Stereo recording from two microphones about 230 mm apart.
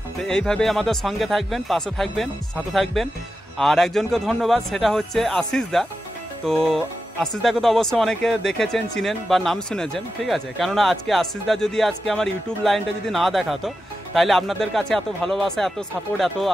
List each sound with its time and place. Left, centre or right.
0.2 s speech: centre